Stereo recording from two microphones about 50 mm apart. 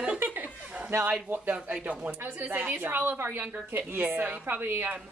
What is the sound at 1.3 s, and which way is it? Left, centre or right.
Speech, right.